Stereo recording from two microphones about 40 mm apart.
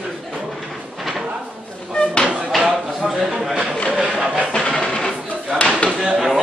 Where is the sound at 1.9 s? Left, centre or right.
Left.